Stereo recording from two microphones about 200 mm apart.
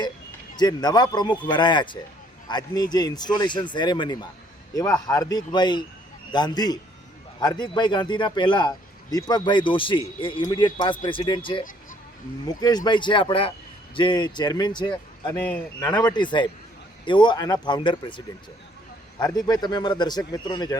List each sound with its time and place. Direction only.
0.5 s a man's voice: 20° left (ahead or behind)
19.5 s a man's voice: 20° left (ahead or behind)